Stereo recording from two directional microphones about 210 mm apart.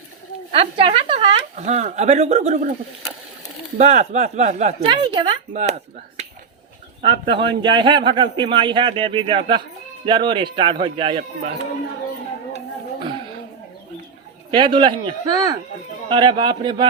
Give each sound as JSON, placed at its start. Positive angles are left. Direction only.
{"t": 0.5, "sound": "a woman's voice", "side_deg": -25}
{"t": 3.8, "sound": "a woman's voice", "side_deg": -35}
{"t": 14.5, "sound": "a man's voice", "side_deg": -20}